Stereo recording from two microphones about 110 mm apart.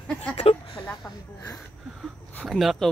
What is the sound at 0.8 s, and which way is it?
Speech, 15° left (ahead or behind).